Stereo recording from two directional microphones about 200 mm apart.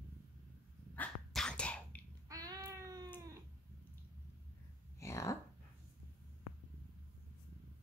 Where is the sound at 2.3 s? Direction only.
15° right (ahead or behind).